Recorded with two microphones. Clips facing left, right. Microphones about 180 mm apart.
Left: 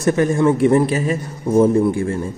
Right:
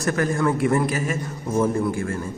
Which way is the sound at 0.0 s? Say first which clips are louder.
Left 6 dB; 25° left (ahead or behind).